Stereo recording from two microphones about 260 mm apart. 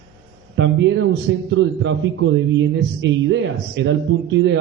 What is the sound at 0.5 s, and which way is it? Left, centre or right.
A man's voice, right.